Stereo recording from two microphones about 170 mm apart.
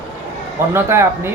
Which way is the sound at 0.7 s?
15° right (ahead or behind).